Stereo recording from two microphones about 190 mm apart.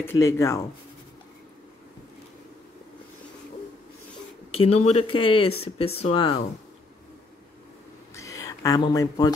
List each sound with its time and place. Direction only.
0.0 s speech: 15° left (ahead or behind)
4.5 s speech: 30° left (ahead or behind)
8.1 s a sound: 15° left (ahead or behind)